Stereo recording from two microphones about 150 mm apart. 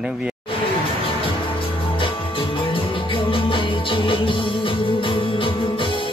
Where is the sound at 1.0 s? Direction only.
35° left (ahead or behind).